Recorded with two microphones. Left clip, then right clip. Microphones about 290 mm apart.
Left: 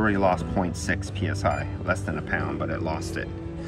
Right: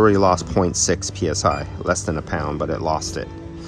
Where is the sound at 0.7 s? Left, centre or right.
Right.